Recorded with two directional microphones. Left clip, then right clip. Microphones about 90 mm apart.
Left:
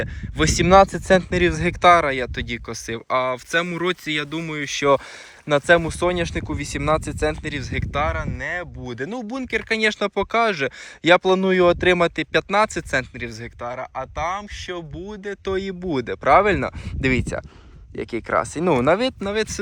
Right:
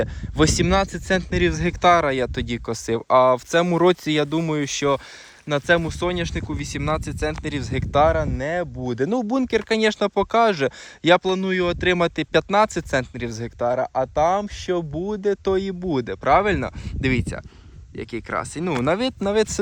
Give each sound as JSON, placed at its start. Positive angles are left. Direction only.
{"t": 0.0, "sound": "speech", "side_deg": -35}
{"t": 0.6, "sound": "speech", "side_deg": -5}
{"t": 1.3, "sound": "speech", "side_deg": -20}
{"t": 2.1, "sound": "speech", "side_deg": -45}
{"t": 5.5, "sound": "speech", "side_deg": -15}
{"t": 7.4, "sound": "speech", "side_deg": -40}
{"t": 8.0, "sound": "speech", "side_deg": -70}
{"t": 9.5, "sound": "speech", "side_deg": -40}
{"t": 11.2, "sound": "speech", "side_deg": -5}
{"t": 11.9, "sound": "speech", "side_deg": -20}
{"t": 13.2, "sound": "speech", "side_deg": -50}
{"t": 15.4, "sound": "speech", "side_deg": -30}
{"t": 18.9, "sound": "speech", "side_deg": -20}
{"t": 19.2, "sound": "speech", "side_deg": -35}